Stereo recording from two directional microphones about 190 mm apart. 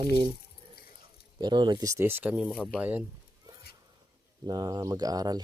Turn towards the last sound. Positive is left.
turn(degrees=-20)  # may be behind; listen again after turning